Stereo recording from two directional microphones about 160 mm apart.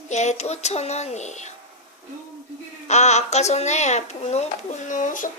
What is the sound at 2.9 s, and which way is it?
Speech, 45° left (ahead or behind).